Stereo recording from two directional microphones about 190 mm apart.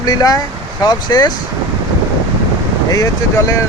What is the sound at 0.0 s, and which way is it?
Speech, 20° left (ahead or behind).